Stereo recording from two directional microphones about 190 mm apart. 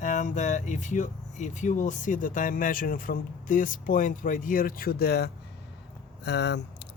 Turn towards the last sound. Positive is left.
turn(degrees=65)  # may be behind; listen again after turning